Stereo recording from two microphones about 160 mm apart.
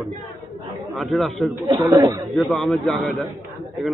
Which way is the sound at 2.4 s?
Centre (ahead or behind).